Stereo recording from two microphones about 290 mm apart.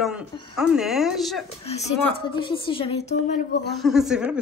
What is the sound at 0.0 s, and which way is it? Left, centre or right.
A woman's voice, centre.